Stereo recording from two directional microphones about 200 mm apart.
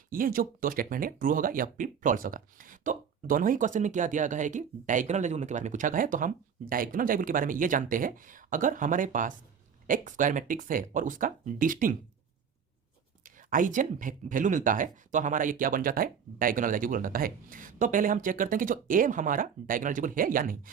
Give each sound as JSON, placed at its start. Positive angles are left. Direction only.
{"t": 0.1, "sound": "speech", "side_deg": -45}
{"t": 13.2, "sound": "speech", "side_deg": -40}